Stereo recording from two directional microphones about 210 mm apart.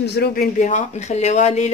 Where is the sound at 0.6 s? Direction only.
35° left (ahead or behind).